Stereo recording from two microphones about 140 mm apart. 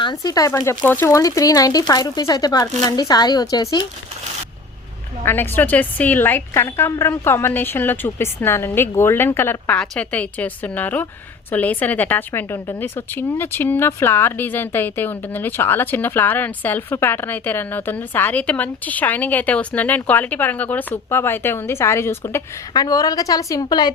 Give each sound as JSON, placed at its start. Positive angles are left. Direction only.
{"t": 0.0, "sound": "speech", "side_deg": 30}
{"t": 5.2, "sound": "a woman's voice", "side_deg": 15}